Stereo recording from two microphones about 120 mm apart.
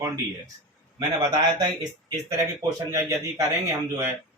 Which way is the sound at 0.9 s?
35° right (ahead or behind).